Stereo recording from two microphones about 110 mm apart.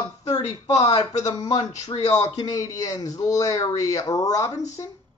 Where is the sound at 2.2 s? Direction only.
30° left (ahead or behind).